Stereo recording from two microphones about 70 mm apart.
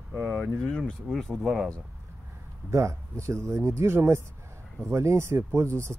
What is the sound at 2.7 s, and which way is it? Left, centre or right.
Speech, right.